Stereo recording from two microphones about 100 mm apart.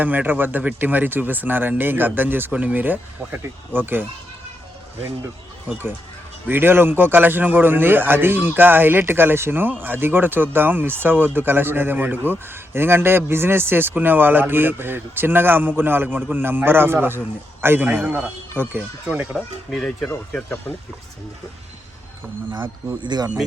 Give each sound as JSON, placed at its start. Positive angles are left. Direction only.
{"t": 0.0, "sound": "speech", "side_deg": -15}
{"t": 5.6, "sound": "speech", "side_deg": -20}
{"t": 19.7, "sound": "speech", "side_deg": 5}
{"t": 23.0, "sound": "speech", "side_deg": -45}